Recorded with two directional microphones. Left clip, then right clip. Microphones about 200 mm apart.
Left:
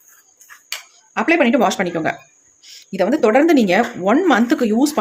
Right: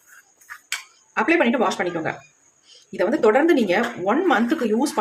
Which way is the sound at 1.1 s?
35° left (ahead or behind).